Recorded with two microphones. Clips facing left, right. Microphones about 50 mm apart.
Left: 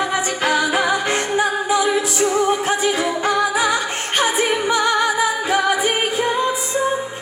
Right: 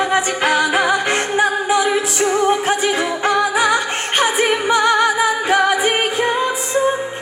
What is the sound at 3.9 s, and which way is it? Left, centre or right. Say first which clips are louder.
Music: right 2 dB; right.